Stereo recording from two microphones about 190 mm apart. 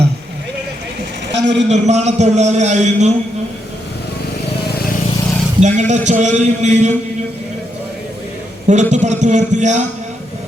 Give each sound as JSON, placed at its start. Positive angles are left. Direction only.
{"t": 1.3, "sound": "a sound", "side_deg": -65}
{"t": 1.7, "sound": "a man's voice", "side_deg": -35}
{"t": 5.5, "sound": "a man's voice", "side_deg": -40}
{"t": 8.6, "sound": "a man's voice", "side_deg": -40}